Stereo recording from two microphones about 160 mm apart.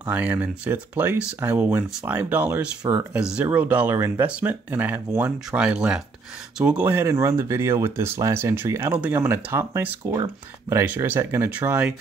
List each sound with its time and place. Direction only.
0.0 s speech: 10° right (ahead or behind)
3.1 s speech: 5° right (ahead or behind)